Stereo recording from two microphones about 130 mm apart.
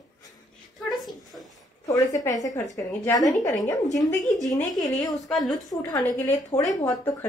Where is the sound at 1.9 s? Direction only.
25° left (ahead or behind).